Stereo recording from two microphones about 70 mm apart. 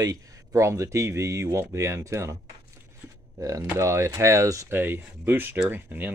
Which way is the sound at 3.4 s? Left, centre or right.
Right.